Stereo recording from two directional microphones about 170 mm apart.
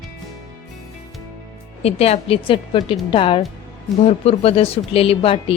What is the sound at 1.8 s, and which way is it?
Speech, 35° left (ahead or behind).